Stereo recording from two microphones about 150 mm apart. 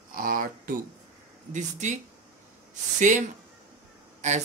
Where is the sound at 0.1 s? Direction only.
65° right (ahead or behind).